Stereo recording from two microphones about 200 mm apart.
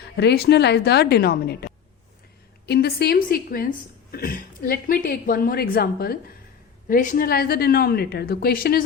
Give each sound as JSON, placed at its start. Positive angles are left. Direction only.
{"t": 0.2, "sound": "a woman's voice", "side_deg": 55}